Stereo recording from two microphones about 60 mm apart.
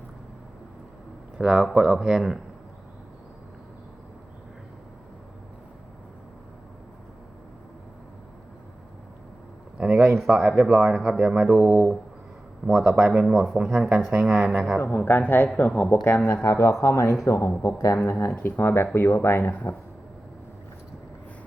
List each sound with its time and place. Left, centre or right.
1.4 s speech: centre
9.7 s speech: centre
14.8 s speech: left
16.0 s speech: left
18.3 s speech: left